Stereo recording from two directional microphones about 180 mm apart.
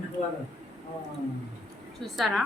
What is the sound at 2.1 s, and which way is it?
Speech, centre (ahead or behind).